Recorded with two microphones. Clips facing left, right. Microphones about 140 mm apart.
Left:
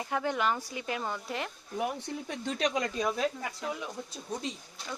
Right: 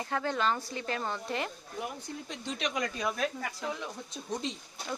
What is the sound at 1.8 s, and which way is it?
Speech, 70° left (ahead or behind).